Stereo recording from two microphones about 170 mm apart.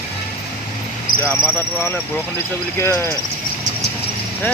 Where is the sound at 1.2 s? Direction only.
15° left (ahead or behind).